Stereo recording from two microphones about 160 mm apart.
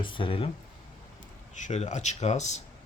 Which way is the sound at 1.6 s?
45° left (ahead or behind).